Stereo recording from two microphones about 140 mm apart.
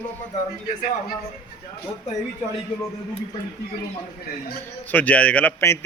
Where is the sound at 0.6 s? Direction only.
80° left.